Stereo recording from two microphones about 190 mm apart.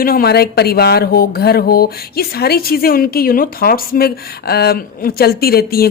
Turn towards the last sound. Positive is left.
turn(degrees=55)  # may be behind; listen again after turning